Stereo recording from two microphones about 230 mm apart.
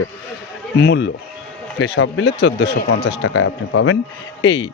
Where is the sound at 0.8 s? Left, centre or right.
Left.